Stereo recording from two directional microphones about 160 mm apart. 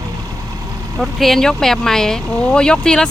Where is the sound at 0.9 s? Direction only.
Centre (ahead or behind).